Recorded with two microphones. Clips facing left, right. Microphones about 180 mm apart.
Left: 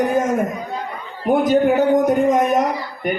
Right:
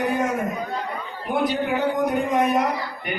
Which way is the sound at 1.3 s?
45° left (ahead or behind).